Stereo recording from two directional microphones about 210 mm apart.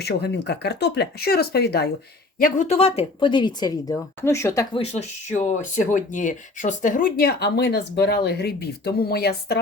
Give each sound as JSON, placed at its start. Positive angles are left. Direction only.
{"t": 0.0, "sound": "speech", "side_deg": 50}
{"t": 2.4, "sound": "a woman's voice", "side_deg": 35}
{"t": 4.8, "sound": "speech", "side_deg": 30}